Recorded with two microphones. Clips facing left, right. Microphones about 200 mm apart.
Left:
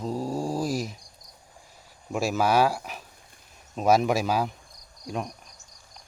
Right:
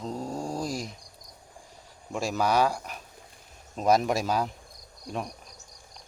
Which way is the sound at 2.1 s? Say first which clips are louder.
Left 2 dB; 5° left (ahead or behind).